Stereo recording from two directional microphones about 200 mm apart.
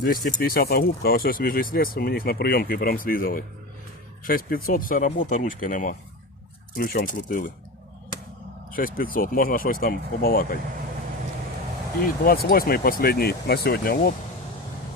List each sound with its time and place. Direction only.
0.0 s speech: 45° left (ahead or behind)
8.7 s speech: 45° left (ahead or behind)
12.2 s speech: 45° left (ahead or behind)